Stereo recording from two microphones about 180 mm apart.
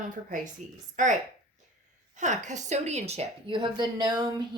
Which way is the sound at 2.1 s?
40° right (ahead or behind).